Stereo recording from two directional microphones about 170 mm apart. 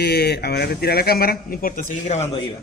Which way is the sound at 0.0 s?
75° left (ahead or behind).